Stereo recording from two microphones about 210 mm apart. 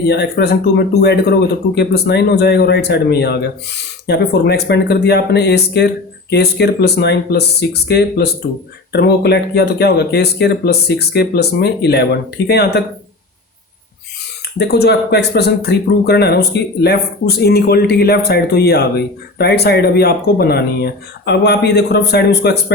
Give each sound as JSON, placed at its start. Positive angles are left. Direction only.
{"t": 0.1, "sound": "speech", "side_deg": 50}
{"t": 14.6, "sound": "speech", "side_deg": 50}